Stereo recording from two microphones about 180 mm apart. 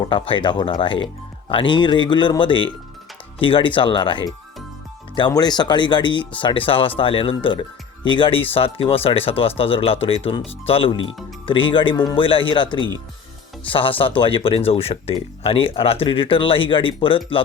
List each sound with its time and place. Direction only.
0.1 s speech: 30° left (ahead or behind)